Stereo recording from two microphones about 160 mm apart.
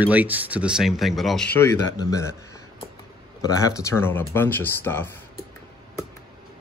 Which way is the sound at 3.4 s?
20° left (ahead or behind).